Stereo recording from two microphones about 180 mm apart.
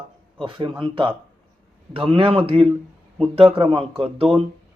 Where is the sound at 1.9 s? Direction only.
30° right (ahead or behind).